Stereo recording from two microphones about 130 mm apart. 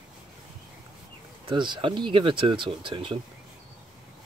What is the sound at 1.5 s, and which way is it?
Speech, 40° right (ahead or behind).